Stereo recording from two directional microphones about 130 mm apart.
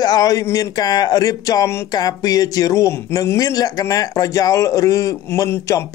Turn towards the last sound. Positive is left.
turn(degrees=25)  # may be behind; listen again after turning